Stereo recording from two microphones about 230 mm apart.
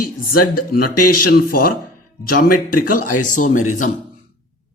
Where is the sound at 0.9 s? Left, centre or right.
Left.